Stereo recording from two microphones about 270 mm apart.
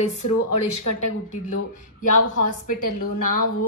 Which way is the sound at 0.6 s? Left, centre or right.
Left.